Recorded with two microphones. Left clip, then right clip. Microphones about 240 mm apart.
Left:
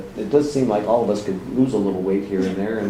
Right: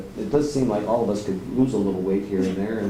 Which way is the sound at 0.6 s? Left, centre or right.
Centre.